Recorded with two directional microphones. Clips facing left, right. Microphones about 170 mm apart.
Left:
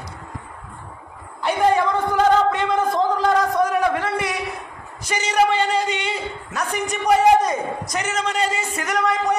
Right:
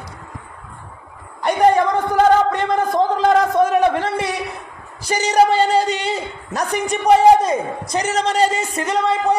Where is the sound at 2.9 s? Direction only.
20° right (ahead or behind).